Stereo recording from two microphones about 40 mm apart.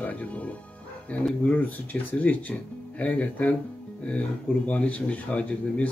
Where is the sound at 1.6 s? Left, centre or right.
Left.